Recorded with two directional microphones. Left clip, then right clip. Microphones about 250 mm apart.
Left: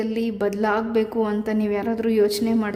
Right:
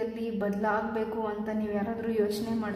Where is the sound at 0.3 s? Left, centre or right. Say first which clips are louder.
Left 6 dB; left.